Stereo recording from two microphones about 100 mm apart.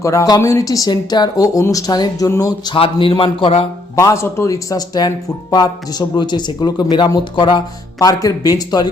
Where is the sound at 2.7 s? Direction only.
65° left (ahead or behind).